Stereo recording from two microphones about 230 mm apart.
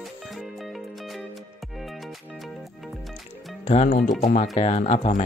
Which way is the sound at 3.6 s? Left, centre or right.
Left.